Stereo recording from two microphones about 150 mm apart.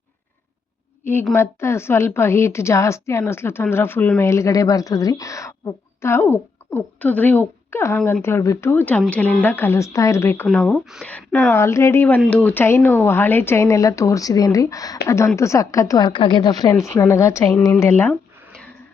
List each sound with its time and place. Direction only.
1.3 s a woman's voice: 15° left (ahead or behind)
11.5 s a woman's voice: 20° left (ahead or behind)